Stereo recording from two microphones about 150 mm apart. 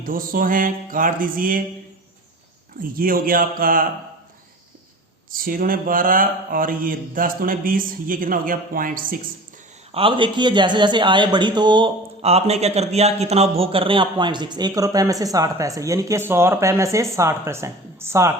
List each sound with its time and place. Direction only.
0.0 s mantra: 70° right (ahead or behind)
2.9 s mantra: 70° right (ahead or behind)
5.3 s mantra: 70° right (ahead or behind)
9.9 s speech: 35° right (ahead or behind)
12.2 s a man's voice: 45° right (ahead or behind); by 18.3 s 20° right (ahead or behind)